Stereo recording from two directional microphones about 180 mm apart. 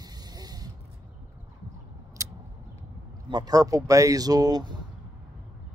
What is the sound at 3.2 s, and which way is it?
Speech, 25° right (ahead or behind).